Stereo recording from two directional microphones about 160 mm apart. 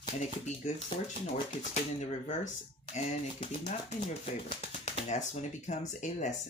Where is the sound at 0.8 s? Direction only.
50° left (ahead or behind).